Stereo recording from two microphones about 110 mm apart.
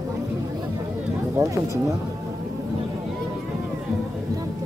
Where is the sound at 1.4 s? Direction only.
25° right (ahead or behind).